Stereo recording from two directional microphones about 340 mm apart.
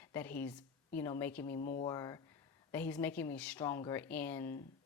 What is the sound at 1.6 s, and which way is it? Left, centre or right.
Speech, left.